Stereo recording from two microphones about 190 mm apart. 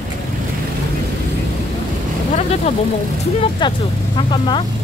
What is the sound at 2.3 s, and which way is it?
Vehicle, 35° left (ahead or behind).